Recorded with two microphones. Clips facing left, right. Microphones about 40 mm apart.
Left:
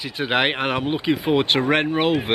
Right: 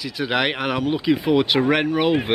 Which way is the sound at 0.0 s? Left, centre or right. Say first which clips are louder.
Left 1 dB; left.